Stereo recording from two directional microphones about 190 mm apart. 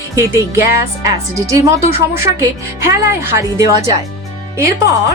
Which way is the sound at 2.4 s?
15° right (ahead or behind).